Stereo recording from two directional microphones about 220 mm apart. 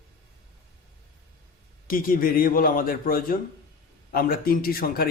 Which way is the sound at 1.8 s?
40° left (ahead or behind).